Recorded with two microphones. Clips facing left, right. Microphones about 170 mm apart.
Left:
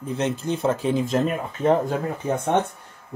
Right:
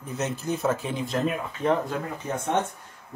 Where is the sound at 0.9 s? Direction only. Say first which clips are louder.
Left 5 dB; 45° left (ahead or behind).